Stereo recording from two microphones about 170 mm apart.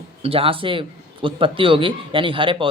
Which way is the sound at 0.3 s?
35° right (ahead or behind).